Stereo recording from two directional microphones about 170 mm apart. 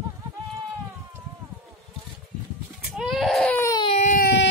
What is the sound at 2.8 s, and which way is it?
Goat, 5° right (ahead or behind).